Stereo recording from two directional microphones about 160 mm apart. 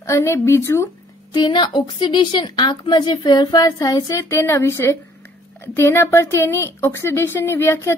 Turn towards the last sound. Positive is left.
turn(degrees=15)  # may be behind; listen again after turning